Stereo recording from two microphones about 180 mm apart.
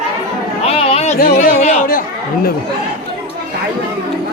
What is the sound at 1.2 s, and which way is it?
Speech, 55° left (ahead or behind).